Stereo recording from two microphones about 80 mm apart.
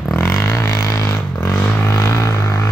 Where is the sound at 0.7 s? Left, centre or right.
Left.